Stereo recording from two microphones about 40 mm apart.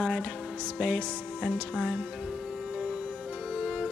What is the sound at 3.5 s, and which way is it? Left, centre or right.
Music, right.